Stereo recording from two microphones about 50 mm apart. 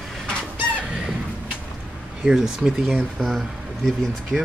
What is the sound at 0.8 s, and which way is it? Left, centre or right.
Fowl, centre.